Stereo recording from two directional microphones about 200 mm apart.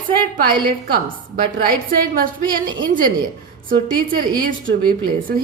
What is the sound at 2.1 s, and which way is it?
Speech, 45° right (ahead or behind).